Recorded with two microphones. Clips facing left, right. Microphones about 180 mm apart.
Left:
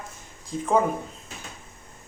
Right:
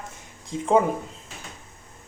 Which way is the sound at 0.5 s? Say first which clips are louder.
Even; 25° right (ahead or behind).